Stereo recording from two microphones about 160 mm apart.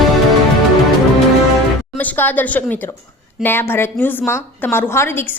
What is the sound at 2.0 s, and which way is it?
A woman's voice, 10° left (ahead or behind).